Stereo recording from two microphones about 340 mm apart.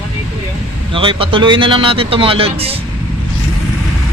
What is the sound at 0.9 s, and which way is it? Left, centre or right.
A man's voice, centre.